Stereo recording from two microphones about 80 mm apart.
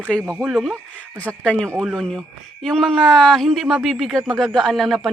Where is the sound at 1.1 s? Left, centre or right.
Centre.